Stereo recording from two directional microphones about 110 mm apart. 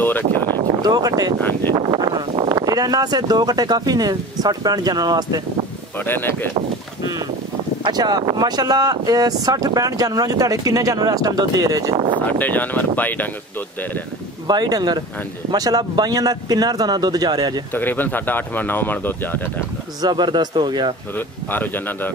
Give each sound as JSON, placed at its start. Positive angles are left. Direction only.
{"t": 0.5, "sound": "a sound", "side_deg": -40}
{"t": 1.7, "sound": "speech", "side_deg": -40}
{"t": 5.9, "sound": "speech", "side_deg": 20}
{"t": 7.8, "sound": "speech", "side_deg": -35}
{"t": 12.3, "sound": "speech", "side_deg": 15}
{"t": 14.5, "sound": "speech", "side_deg": -40}
{"t": 17.7, "sound": "speech", "side_deg": 20}
{"t": 20.0, "sound": "speech", "side_deg": -40}
{"t": 21.5, "sound": "speech", "side_deg": 15}